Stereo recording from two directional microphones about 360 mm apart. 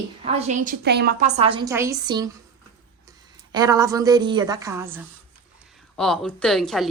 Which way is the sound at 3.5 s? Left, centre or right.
Centre.